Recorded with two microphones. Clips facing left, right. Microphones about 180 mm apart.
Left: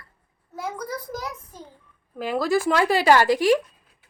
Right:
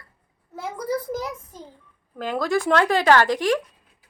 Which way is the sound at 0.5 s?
25° right (ahead or behind).